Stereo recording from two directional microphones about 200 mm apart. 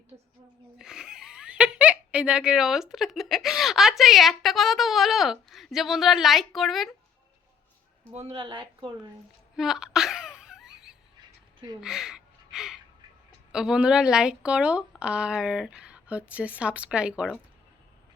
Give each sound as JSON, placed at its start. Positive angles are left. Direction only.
{"t": 0.8, "sound": "speech", "side_deg": -5}
{"t": 8.1, "sound": "speech", "side_deg": -30}
{"t": 9.6, "sound": "a sound", "side_deg": 0}
{"t": 11.2, "sound": "a sound", "side_deg": -20}
{"t": 11.8, "sound": "gasp", "side_deg": 0}
{"t": 13.5, "sound": "a woman's voice", "side_deg": -5}